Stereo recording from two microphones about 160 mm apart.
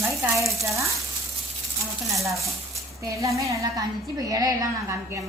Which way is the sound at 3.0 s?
20° right (ahead or behind).